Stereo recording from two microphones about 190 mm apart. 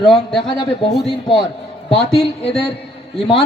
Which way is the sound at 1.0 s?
25° left (ahead or behind).